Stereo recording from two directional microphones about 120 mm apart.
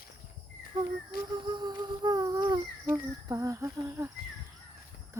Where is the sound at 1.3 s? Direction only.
40° right (ahead or behind).